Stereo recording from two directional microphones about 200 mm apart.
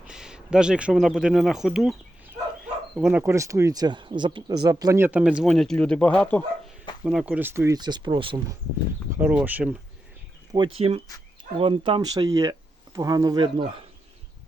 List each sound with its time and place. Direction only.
0.1 s speech: 5° right (ahead or behind); by 8.5 s 25° right (ahead or behind)
9.0 s speech: 10° right (ahead or behind)
10.8 s speech: 30° right (ahead or behind)